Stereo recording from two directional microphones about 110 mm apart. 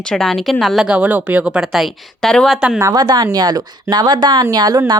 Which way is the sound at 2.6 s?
10° right (ahead or behind).